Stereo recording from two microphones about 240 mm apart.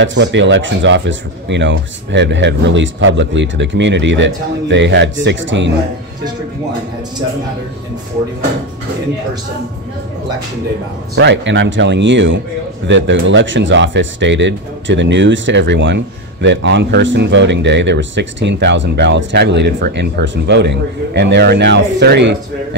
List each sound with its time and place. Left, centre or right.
0.0 s speech: right
11.1 s speech: right